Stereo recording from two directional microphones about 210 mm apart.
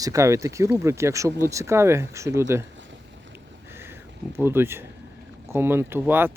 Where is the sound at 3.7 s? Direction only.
10° right (ahead or behind).